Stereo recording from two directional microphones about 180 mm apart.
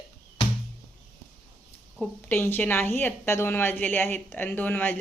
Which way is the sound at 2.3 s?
10° left (ahead or behind).